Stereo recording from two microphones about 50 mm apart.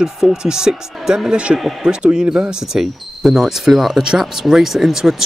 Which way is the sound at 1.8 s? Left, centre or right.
Centre.